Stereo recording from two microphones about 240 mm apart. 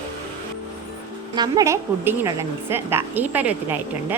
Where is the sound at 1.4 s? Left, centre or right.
Centre.